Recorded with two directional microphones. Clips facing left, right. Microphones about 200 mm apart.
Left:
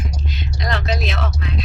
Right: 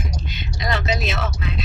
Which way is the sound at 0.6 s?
Centre (ahead or behind).